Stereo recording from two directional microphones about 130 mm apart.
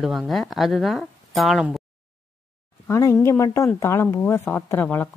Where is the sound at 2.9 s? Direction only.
25° left (ahead or behind).